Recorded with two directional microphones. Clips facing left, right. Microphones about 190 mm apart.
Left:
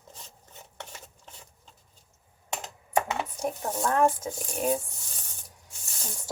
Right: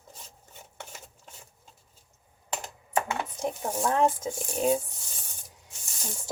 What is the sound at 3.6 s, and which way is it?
Speech, 10° right (ahead or behind).